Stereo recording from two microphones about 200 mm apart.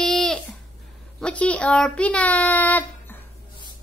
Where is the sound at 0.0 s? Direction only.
Centre (ahead or behind).